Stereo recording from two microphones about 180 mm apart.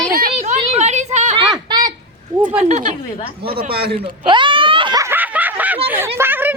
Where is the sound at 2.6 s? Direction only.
40° right (ahead or behind).